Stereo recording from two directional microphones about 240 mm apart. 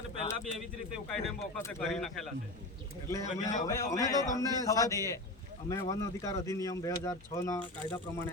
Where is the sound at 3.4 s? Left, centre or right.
Left.